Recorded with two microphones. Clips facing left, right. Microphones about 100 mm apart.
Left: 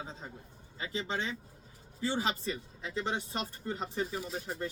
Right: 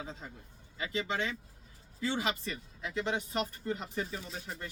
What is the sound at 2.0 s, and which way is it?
Speech, 30° left (ahead or behind).